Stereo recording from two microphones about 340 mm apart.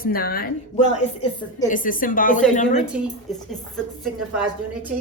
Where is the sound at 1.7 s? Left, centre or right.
Left.